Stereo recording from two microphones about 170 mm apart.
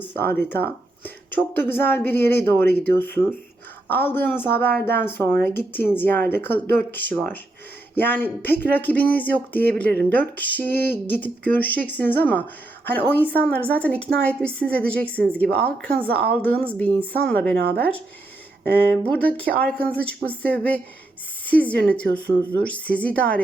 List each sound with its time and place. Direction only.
0.1 s speech: 10° left (ahead or behind)
18.6 s speech: 10° left (ahead or behind)